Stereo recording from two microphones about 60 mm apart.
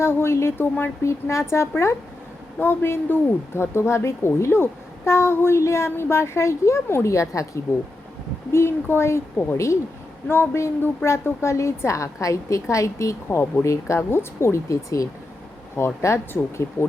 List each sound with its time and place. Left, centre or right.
0.0 s a woman's voice: left
1.0 s a woman's voice: left
8.5 s a woman's voice: left
10.2 s a woman's voice: left
14.7 s a woman's voice: left
15.7 s a woman's voice: left